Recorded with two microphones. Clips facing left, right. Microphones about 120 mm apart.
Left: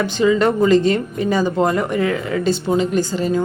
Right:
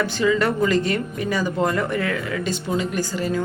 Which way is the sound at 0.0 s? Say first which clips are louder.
Left 4 dB; 25° left (ahead or behind).